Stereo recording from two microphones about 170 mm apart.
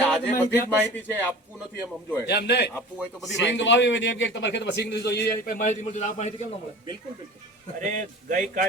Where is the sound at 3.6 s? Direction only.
90° left.